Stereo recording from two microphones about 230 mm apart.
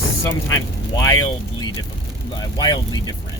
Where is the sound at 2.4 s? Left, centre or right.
Centre.